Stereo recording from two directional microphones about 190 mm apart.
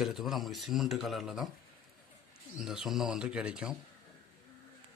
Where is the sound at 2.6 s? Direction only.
Centre (ahead or behind).